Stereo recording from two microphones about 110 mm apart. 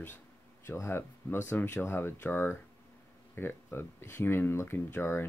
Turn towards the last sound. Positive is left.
turn(degrees=20)  # may be behind; listen again after turning